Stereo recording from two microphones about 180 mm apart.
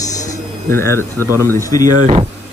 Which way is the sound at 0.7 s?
15° left (ahead or behind).